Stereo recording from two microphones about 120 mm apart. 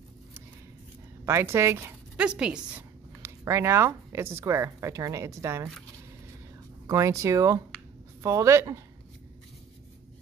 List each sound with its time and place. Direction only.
1.2 s speech: 20° right (ahead or behind)
2.1 s a woman's voice: 10° right (ahead or behind)
3.2 s speech: 20° right (ahead or behind)
6.9 s speech: 25° right (ahead or behind)